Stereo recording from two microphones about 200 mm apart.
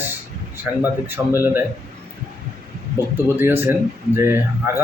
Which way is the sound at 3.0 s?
15° left (ahead or behind).